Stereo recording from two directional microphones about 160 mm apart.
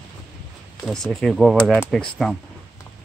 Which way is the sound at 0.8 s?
Centre (ahead or behind).